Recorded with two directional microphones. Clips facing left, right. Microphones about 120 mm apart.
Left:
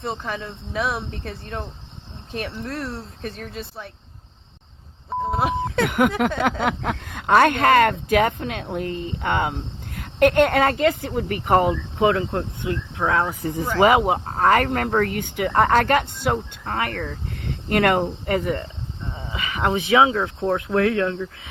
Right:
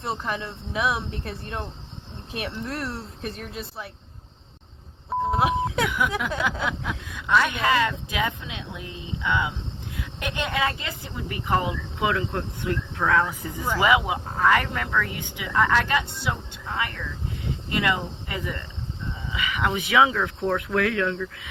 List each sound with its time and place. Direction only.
0.0 s speech: centre (ahead or behind)
5.0 s speech: centre (ahead or behind)
6.2 s a sound: 60° left (ahead or behind)
6.6 s speech: 60° left (ahead or behind); by 13.3 s 25° left (ahead or behind)
13.4 s speech: 45° left (ahead or behind)
19.3 s speech: 35° left (ahead or behind)